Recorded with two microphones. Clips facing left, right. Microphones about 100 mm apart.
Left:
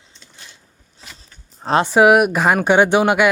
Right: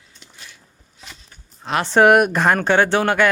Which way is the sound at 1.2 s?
35° left (ahead or behind).